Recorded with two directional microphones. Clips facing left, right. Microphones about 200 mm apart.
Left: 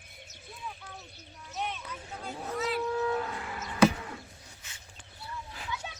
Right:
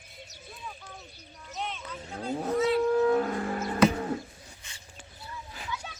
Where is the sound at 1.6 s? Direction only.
10° left (ahead or behind).